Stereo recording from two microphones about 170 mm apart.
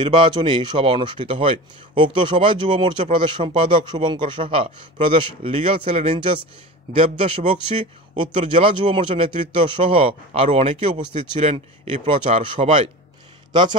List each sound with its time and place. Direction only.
0.0 s a man's voice: 30° right (ahead or behind)